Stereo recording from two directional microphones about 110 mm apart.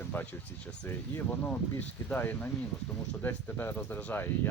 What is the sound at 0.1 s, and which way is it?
Speech, 15° left (ahead or behind).